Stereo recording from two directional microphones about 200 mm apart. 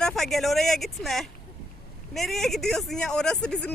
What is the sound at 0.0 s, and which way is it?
Speech, centre (ahead or behind).